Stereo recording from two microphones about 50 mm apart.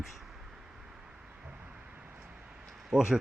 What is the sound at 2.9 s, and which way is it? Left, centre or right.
Speech, centre.